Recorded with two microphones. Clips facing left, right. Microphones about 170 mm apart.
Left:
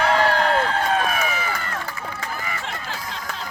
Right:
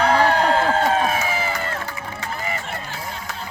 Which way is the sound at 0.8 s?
25° right (ahead or behind).